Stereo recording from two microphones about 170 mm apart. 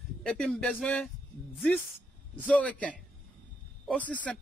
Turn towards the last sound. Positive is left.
turn(degrees=5)  # may be behind; listen again after turning